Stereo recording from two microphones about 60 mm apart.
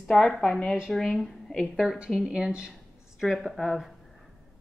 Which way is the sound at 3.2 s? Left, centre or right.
Centre.